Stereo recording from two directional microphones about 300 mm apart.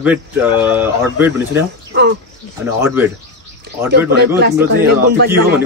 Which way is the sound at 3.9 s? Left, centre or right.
Right.